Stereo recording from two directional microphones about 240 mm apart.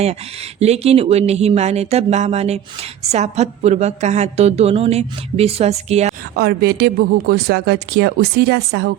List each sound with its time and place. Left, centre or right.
0.6 s a woman's voice: right
6.3 s speech: right